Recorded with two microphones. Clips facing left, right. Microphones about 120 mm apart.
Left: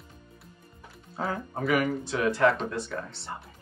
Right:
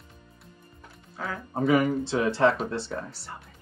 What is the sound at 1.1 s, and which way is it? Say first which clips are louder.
Speech: left 3 dB; 30° left (ahead or behind).